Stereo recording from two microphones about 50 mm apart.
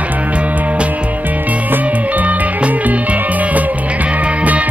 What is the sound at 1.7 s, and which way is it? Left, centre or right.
Music, right.